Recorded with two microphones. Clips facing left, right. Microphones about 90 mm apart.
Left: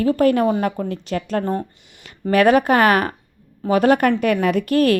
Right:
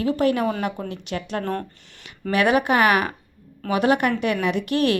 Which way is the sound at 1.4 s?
15° left (ahead or behind).